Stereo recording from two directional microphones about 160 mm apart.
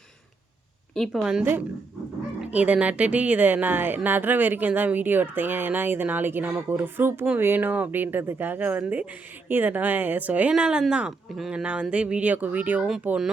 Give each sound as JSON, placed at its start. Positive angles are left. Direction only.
{"t": 0.9, "sound": "a woman's voice", "side_deg": 0}